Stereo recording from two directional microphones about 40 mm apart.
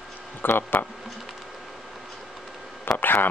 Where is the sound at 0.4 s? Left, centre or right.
Left.